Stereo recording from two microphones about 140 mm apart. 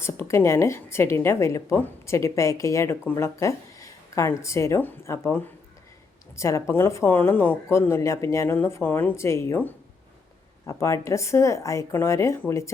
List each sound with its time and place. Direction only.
0.0 s a woman's voice: 20° left (ahead or behind)